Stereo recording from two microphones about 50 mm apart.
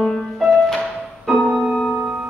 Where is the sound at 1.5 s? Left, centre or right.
Centre.